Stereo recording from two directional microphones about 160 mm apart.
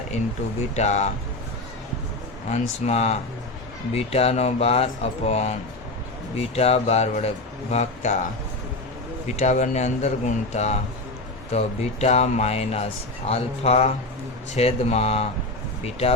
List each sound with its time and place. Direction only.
0.8 s speech: 45° left (ahead or behind)
2.5 s speech: 45° left (ahead or behind)
9.2 s speech: 45° left (ahead or behind)